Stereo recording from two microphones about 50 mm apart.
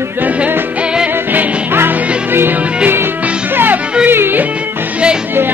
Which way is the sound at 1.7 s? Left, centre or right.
Right.